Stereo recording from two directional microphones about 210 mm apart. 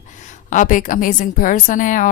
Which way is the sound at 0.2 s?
35° left (ahead or behind).